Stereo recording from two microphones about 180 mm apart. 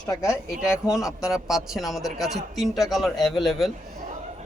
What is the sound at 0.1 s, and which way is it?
Speech, 20° left (ahead or behind).